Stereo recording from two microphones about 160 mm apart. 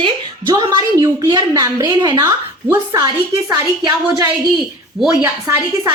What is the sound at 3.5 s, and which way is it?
Speech, 25° right (ahead or behind).